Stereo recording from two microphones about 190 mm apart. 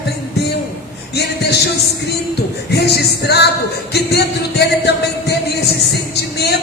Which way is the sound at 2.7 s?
60° left (ahead or behind).